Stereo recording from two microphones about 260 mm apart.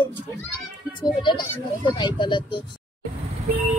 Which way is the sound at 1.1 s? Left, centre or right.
Centre.